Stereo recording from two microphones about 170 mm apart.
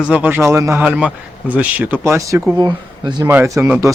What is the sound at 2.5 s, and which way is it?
Speech, 25° right (ahead or behind).